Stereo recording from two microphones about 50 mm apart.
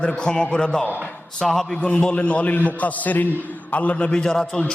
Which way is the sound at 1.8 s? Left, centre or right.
Left.